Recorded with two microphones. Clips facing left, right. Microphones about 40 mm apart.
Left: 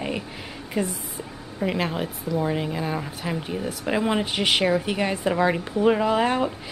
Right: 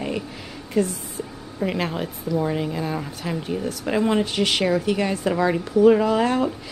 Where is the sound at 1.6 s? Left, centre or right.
Centre.